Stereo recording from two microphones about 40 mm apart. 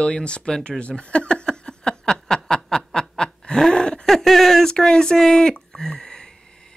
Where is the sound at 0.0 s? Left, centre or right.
Left.